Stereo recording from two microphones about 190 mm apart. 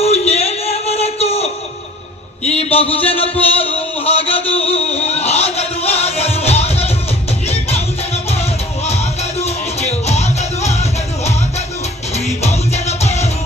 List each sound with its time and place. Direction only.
0.0 s music: 30° left (ahead or behind)
2.4 s a sound: 30° left (ahead or behind)
7.4 s music: 35° left (ahead or behind)